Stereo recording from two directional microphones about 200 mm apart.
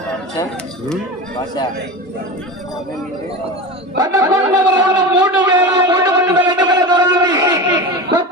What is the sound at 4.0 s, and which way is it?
Speech, 15° right (ahead or behind).